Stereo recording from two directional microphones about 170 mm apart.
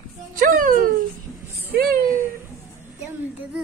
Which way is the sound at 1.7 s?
65° right (ahead or behind).